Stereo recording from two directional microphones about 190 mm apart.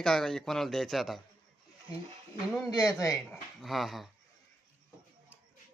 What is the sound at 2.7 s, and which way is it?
Speech, 20° left (ahead or behind).